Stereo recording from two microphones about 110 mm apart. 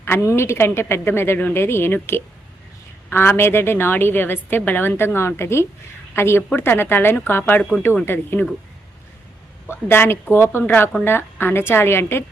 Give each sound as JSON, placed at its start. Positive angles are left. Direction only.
{"t": 0.0, "sound": "a woman's voice", "side_deg": 25}
{"t": 9.6, "sound": "a woman's voice", "side_deg": 20}